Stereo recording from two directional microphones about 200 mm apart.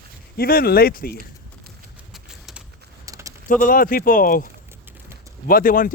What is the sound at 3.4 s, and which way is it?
Speech, 40° left (ahead or behind).